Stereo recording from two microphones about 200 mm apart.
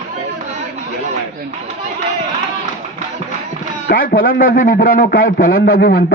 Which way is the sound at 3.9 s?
45° left (ahead or behind).